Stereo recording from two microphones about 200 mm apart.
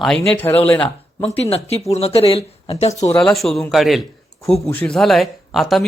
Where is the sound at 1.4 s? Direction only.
30° left (ahead or behind).